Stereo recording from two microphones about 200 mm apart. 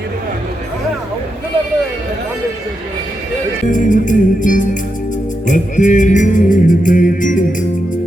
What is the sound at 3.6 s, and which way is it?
Music, 40° left (ahead or behind).